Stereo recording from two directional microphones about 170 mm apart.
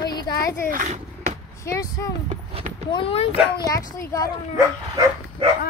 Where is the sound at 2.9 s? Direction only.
30° left (ahead or behind).